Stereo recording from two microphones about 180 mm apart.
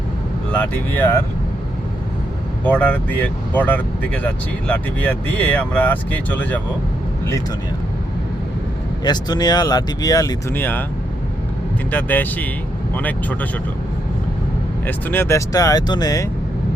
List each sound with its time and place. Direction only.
0.5 s speech: 10° left (ahead or behind)
2.6 s speech: 10° left (ahead or behind)
9.0 s speech: 20° left (ahead or behind)
11.9 s speech: 10° left (ahead or behind)
14.8 s speech: 10° left (ahead or behind)